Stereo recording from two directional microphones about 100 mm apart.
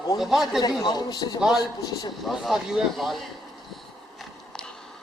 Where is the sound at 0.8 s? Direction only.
40° left (ahead or behind).